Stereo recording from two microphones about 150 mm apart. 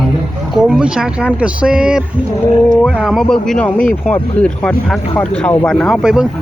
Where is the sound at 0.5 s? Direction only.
5° right (ahead or behind).